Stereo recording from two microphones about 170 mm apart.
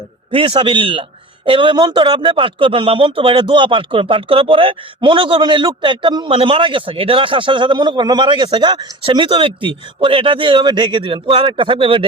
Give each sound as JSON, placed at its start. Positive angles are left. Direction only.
{"t": 0.3, "sound": "a man's voice", "side_deg": -30}